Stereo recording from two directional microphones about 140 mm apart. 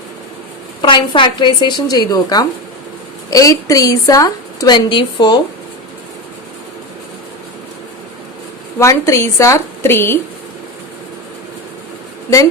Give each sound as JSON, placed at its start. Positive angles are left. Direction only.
{"t": 0.8, "sound": "a woman's voice", "side_deg": 35}
{"t": 8.8, "sound": "a woman's voice", "side_deg": 20}